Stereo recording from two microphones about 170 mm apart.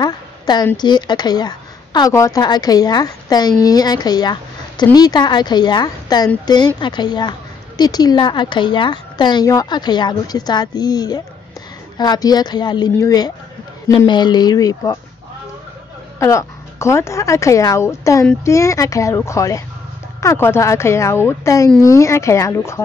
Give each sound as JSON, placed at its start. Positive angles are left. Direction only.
{"t": 0.0, "sound": "a sound", "side_deg": 25}
{"t": 0.7, "sound": "a woman's voice", "side_deg": 25}
{"t": 16.2, "sound": "a woman's voice", "side_deg": 15}